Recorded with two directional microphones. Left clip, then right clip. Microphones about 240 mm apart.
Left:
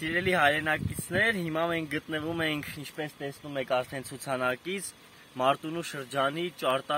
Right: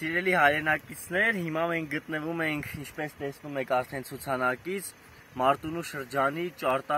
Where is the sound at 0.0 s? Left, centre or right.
Centre.